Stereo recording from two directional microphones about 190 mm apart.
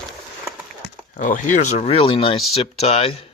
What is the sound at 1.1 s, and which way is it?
Speech, 40° left (ahead or behind).